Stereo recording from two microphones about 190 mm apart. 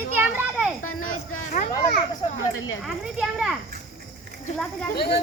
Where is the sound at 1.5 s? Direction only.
40° left (ahead or behind).